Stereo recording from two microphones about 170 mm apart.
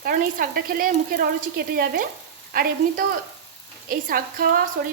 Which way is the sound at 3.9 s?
55° right (ahead or behind).